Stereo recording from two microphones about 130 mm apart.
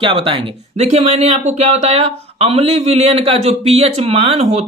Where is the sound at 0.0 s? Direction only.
40° right (ahead or behind).